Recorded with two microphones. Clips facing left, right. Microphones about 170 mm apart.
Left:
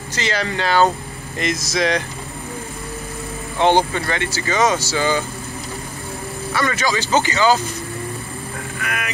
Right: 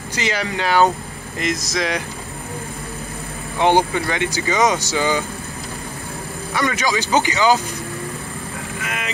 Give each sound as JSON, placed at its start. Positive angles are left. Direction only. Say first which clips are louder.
{"t": 0.1, "sound": "speech", "louder": "even", "side_deg": -10}
{"t": 1.4, "sound": "speech", "louder": "left 2 dB", "side_deg": 0}
{"t": 3.5, "sound": "speech", "louder": "even", "side_deg": -10}
{"t": 6.5, "sound": "speech", "louder": "even", "side_deg": -15}
{"t": 8.8, "sound": "speech", "louder": "left 2 dB", "side_deg": -20}